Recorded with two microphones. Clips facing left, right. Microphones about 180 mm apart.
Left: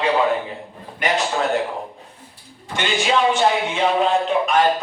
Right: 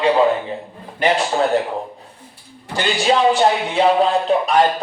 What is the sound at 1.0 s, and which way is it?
Speech, 30° right (ahead or behind).